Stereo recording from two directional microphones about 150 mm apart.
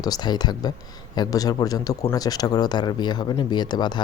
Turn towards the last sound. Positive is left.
turn(degrees=30)  # may be behind; listen again after turning